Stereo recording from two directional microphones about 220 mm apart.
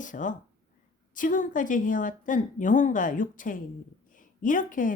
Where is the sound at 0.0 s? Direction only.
35° left (ahead or behind).